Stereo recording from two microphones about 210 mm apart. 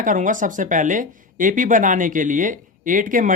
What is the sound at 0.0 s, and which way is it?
Speech, 40° right (ahead or behind).